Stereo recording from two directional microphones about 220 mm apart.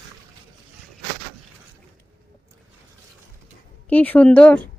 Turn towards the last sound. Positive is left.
turn(degrees=5)  # may be behind; listen again after turning